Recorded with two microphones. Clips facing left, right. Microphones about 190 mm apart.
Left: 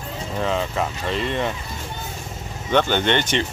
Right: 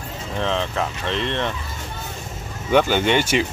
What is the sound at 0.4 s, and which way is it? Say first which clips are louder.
Speech: even; 5° left (ahead or behind).